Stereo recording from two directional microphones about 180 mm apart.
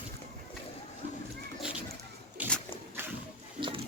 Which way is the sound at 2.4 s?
10° right (ahead or behind).